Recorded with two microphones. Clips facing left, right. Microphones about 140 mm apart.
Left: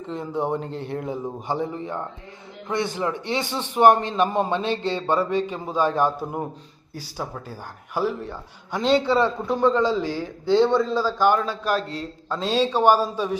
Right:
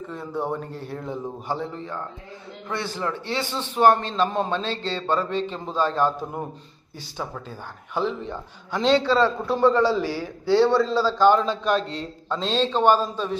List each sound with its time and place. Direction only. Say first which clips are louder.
0.1 s a man's voice: left 3 dB; 15° left (ahead or behind)
11.6 s a man's voice: right 1 dB; 5° left (ahead or behind)